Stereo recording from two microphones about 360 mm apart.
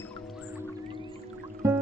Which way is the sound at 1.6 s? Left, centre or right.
Centre.